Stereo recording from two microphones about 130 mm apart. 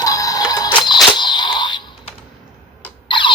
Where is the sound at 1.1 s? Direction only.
35° left (ahead or behind).